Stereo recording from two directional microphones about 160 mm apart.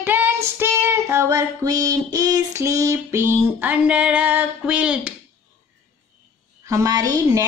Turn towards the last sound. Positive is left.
turn(degrees=-20)  # may be behind; listen again after turning